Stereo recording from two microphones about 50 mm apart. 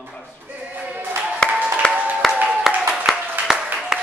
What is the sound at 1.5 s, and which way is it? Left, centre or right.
Applause, right.